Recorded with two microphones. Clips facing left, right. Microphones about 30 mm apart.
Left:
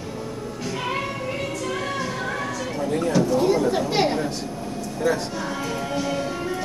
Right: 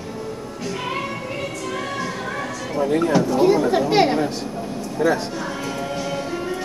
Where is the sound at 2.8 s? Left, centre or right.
Centre.